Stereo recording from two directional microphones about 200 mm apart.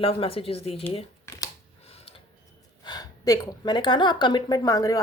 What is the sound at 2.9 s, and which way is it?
A woman's voice, 20° left (ahead or behind).